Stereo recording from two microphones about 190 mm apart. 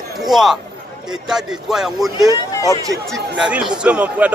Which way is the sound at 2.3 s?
20° left (ahead or behind).